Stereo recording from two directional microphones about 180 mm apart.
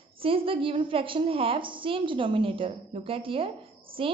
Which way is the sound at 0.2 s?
30° right (ahead or behind).